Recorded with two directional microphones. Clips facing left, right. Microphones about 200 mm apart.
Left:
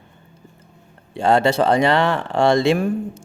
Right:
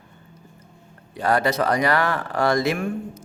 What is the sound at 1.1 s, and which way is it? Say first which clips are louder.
Speech: left 5 dB; 25° left (ahead or behind).